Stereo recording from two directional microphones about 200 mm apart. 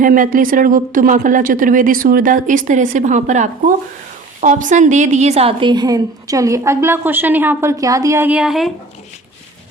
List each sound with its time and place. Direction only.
0.0 s a woman's voice: 40° right (ahead or behind); by 8.7 s centre (ahead or behind)